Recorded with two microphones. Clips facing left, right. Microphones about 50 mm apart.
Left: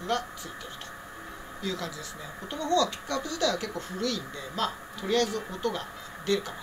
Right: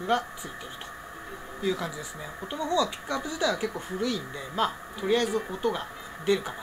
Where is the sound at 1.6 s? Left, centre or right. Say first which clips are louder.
Right 5 dB; centre.